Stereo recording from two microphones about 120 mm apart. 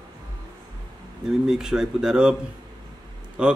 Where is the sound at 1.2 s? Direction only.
5° right (ahead or behind).